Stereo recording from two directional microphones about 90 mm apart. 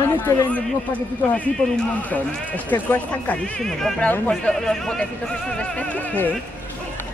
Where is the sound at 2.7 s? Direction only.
20° left (ahead or behind).